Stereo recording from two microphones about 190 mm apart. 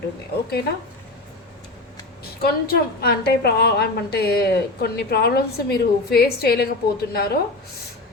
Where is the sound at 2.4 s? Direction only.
55° left (ahead or behind).